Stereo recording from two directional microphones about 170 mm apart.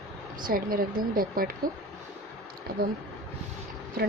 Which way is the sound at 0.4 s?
55° right (ahead or behind).